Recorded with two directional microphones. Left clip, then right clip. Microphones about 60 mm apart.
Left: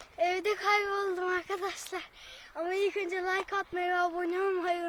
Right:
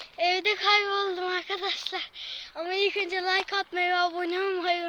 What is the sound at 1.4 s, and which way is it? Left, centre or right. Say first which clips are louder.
Speech: right 3 dB; left.